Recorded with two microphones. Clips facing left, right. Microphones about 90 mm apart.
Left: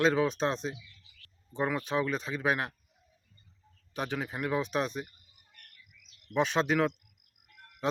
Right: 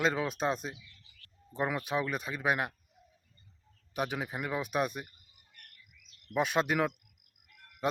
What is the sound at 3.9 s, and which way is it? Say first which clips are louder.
Speech: even; 10° right (ahead or behind).